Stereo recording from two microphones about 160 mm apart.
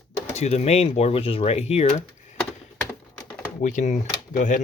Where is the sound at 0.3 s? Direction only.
45° left (ahead or behind).